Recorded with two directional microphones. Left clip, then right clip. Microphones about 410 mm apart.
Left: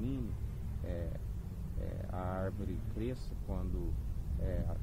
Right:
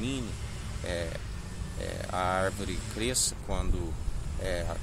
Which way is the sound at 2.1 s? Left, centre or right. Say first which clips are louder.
Right 12 dB; centre.